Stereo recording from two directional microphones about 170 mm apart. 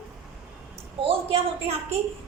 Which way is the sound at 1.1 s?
35° right (ahead or behind).